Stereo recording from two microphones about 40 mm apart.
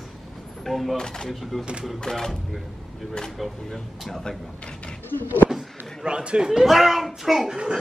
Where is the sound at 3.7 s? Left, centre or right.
Centre.